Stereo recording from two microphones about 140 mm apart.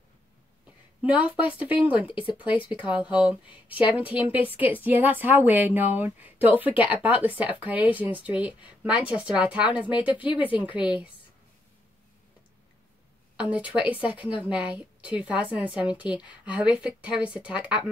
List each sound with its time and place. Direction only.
1.0 s a woman's voice: 10° right (ahead or behind)
2.4 s speech: 40° left (ahead or behind)
2.7 s a woman's voice: 10° right (ahead or behind)
13.4 s a woman's voice: 10° right (ahead or behind)